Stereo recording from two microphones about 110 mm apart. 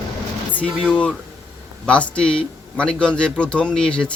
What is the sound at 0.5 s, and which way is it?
Speech, 10° left (ahead or behind).